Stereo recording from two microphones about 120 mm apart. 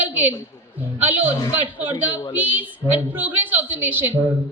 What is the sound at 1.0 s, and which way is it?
Speech, 15° right (ahead or behind).